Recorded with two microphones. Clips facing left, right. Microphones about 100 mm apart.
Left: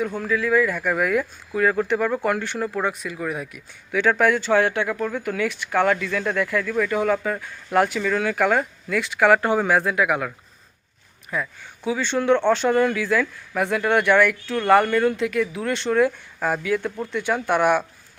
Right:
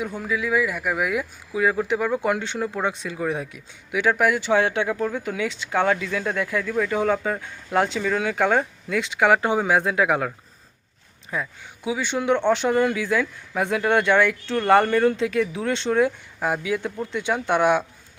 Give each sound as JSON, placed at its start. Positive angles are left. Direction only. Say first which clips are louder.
{"t": 0.2, "sound": "speech", "louder": "left 2 dB", "side_deg": -15}
{"t": 2.9, "sound": "speech", "louder": "right 2 dB", "side_deg": -30}
{"t": 3.9, "sound": "speech", "louder": "left 1 dB", "side_deg": -15}
{"t": 11.3, "sound": "speech", "louder": "left 1 dB", "side_deg": -20}